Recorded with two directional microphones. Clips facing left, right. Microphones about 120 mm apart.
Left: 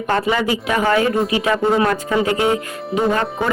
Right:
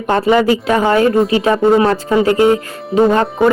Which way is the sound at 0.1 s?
30° right (ahead or behind).